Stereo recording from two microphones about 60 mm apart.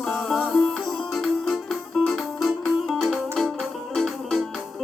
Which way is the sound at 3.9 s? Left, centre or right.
Centre.